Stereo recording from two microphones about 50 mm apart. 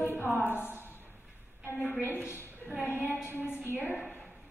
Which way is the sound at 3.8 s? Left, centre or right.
Left.